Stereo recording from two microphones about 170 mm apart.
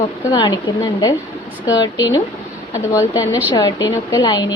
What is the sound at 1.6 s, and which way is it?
A woman's voice, 20° left (ahead or behind).